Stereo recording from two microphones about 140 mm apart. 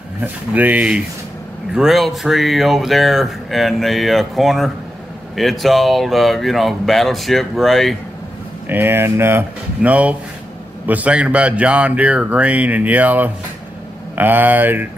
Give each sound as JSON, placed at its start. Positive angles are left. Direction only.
{"t": 0.2, "sound": "speech", "side_deg": -10}
{"t": 8.6, "sound": "speech", "side_deg": -15}